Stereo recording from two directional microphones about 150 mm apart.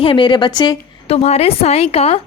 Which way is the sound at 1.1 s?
45° left (ahead or behind).